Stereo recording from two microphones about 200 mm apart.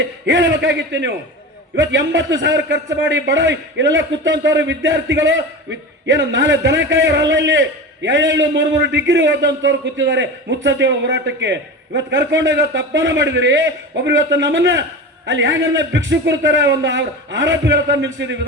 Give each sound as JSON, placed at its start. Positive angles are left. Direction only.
{"t": 0.0, "sound": "a man's voice", "side_deg": -65}